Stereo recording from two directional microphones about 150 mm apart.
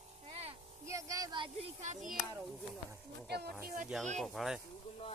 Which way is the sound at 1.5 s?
50° right (ahead or behind).